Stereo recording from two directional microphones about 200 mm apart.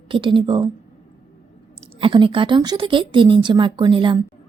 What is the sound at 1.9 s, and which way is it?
A woman's voice, 25° right (ahead or behind).